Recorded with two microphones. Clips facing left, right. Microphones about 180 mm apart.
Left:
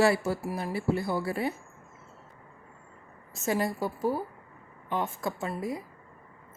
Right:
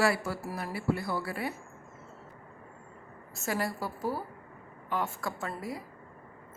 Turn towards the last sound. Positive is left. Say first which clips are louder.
# left 4 dB
turn(degrees=20)  # may be behind; listen again after turning